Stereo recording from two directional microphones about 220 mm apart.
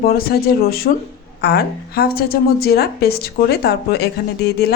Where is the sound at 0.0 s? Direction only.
40° left (ahead or behind).